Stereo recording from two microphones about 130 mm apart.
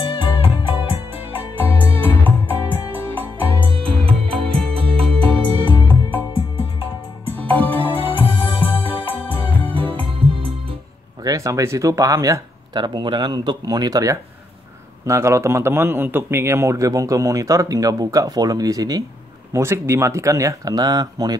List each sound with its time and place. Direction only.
0.0 s music: 45° left (ahead or behind)
1.5 s music: 15° left (ahead or behind)
3.7 s music: 45° right (ahead or behind)
5.7 s music: 15° left (ahead or behind)
6.3 s music: 45° left (ahead or behind)
7.2 s music: 15° left (ahead or behind)
8.0 s music: 45° left (ahead or behind)
9.2 s music: 15° left (ahead or behind)
10.0 s music: 45° right (ahead or behind)
11.2 s a man's voice: 25° right (ahead or behind)